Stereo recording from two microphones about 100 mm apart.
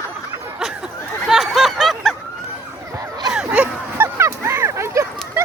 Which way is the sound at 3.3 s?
10° right (ahead or behind).